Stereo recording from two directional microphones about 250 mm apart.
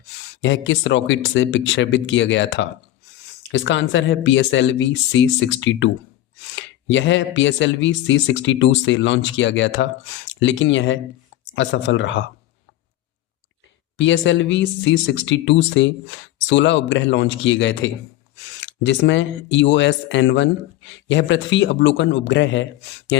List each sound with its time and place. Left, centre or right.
0.4 s speech: left
13.9 s speech: left